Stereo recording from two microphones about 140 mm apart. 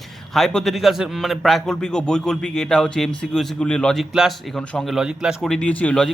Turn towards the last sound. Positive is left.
turn(degrees=10)  # may be behind; listen again after turning